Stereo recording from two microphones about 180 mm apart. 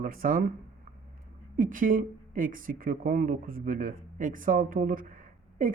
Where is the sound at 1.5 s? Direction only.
50° right (ahead or behind).